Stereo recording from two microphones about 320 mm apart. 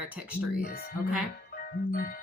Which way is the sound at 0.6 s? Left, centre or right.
Left.